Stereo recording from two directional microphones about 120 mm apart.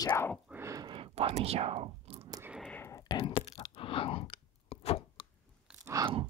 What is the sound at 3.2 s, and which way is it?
Speech, 50° left (ahead or behind).